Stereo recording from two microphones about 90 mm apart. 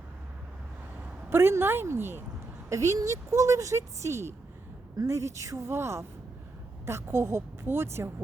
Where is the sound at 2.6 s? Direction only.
35° right (ahead or behind).